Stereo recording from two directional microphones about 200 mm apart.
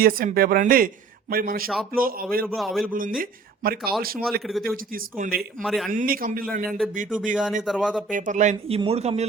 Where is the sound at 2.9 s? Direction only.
45° right (ahead or behind).